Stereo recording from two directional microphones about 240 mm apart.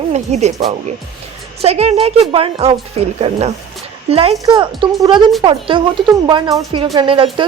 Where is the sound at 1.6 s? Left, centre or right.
Right.